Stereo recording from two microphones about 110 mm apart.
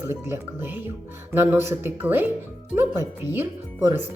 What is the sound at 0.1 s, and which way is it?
Speech, 25° right (ahead or behind).